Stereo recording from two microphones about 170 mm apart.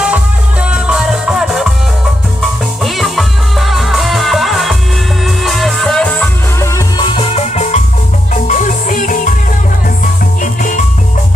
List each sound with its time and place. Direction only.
0.7 s music: 5° right (ahead or behind)
2.8 s music: centre (ahead or behind)
7.0 s music: 35° left (ahead or behind); by 9.3 s 50° left (ahead or behind)
10.4 s music: 50° left (ahead or behind)